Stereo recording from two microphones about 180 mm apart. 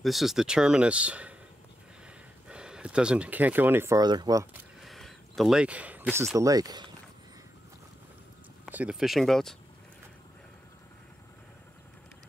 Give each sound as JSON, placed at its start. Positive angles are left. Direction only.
{"t": 0.0, "sound": "speech", "side_deg": 0}
{"t": 2.4, "sound": "speech", "side_deg": -5}
{"t": 4.8, "sound": "a sound", "side_deg": 0}
{"t": 6.3, "sound": "speech", "side_deg": -20}
{"t": 8.6, "sound": "speech", "side_deg": -10}